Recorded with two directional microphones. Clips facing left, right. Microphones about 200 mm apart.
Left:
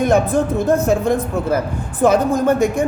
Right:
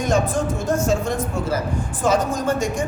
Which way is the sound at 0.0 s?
60° left (ahead or behind).